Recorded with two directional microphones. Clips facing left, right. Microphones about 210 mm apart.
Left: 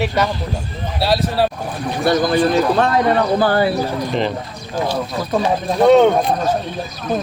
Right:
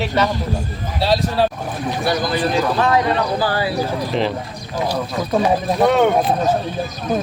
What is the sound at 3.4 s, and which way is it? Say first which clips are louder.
Speech: left 5 dB; 55° left (ahead or behind).